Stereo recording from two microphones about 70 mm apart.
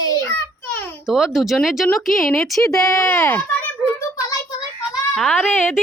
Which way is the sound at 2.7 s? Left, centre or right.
Left.